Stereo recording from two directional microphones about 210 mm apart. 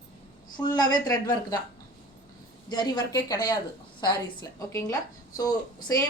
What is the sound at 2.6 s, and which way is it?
A woman's voice, 20° left (ahead or behind).